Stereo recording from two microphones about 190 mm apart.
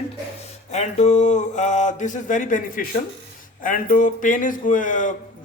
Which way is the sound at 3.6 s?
45° left (ahead or behind).